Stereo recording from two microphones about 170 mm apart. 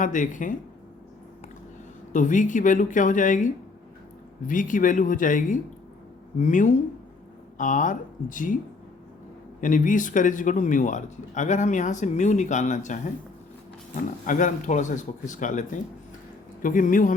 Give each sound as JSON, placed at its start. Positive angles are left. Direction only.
{"t": 0.0, "sound": "speech", "side_deg": 50}
{"t": 2.1, "sound": "speech", "side_deg": 45}
{"t": 9.6, "sound": "speech", "side_deg": 50}
{"t": 14.3, "sound": "speech", "side_deg": 50}